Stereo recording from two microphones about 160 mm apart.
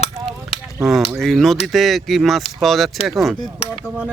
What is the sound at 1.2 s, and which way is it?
Speech, centre (ahead or behind).